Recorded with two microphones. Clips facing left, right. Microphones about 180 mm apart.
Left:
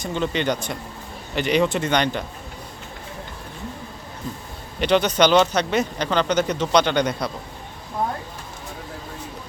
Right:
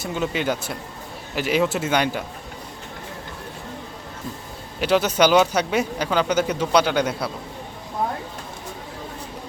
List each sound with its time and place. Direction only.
0.0 s speech: 5° right (ahead or behind)
4.8 s speech: 5° right (ahead or behind)